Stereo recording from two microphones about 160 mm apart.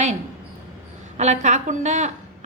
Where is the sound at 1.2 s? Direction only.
45° right (ahead or behind).